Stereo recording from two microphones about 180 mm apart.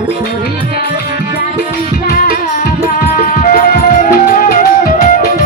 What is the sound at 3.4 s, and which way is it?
Music, 50° left (ahead or behind).